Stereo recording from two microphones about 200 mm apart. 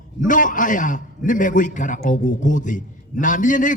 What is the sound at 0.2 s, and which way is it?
A man's voice, 40° left (ahead or behind).